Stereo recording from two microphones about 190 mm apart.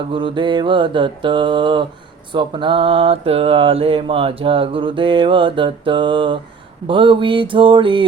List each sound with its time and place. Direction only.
0.1 s mantra: 25° right (ahead or behind)